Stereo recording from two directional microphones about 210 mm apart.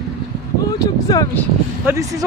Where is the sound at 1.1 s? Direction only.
15° left (ahead or behind).